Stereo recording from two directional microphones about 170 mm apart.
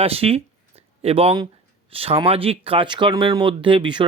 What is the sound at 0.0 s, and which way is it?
Speech, 35° right (ahead or behind).